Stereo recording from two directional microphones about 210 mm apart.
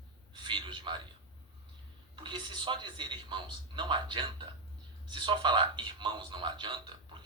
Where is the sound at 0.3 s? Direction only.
20° right (ahead or behind).